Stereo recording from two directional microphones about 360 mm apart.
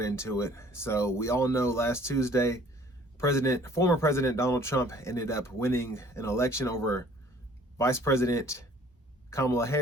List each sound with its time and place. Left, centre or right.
0.0 s speech: centre